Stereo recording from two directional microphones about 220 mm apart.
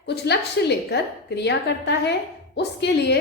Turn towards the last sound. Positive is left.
turn(degrees=50)  # may be behind; listen again after turning